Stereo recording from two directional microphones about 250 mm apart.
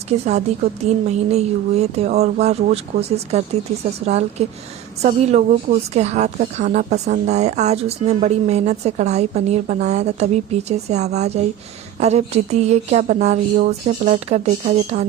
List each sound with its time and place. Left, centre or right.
0.1 s a woman's voice: right